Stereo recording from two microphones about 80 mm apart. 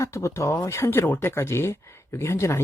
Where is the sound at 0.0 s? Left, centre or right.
Left.